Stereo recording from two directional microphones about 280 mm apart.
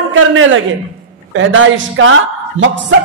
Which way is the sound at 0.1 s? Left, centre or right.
Right.